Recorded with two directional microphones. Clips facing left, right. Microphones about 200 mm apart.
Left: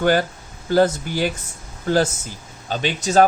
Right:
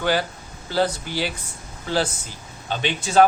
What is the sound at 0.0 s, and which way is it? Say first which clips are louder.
Speech: left 5 dB; 50° left (ahead or behind).